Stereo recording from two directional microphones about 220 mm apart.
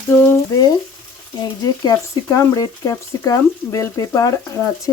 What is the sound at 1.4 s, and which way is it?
Speech, 15° left (ahead or behind).